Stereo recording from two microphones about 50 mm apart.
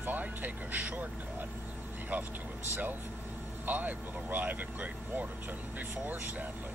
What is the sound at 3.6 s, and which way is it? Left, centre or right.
Speech, right.